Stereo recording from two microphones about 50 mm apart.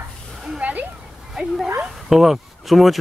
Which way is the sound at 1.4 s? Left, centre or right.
Centre.